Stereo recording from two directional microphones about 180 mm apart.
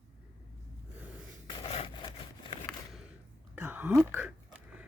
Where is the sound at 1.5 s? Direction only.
30° left (ahead or behind).